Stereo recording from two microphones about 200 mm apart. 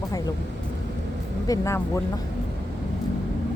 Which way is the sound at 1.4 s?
15° left (ahead or behind).